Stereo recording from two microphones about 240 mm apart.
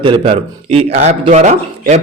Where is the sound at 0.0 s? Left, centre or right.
Right.